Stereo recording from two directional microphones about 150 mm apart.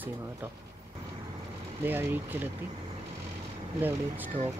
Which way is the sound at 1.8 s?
15° right (ahead or behind).